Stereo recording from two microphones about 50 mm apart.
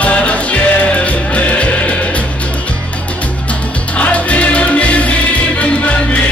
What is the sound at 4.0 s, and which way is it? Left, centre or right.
Music, left.